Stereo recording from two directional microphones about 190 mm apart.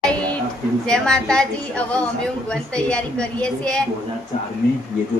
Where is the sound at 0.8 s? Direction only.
5° left (ahead or behind).